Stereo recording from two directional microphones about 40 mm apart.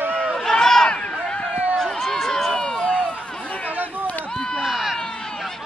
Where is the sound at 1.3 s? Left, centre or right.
Left.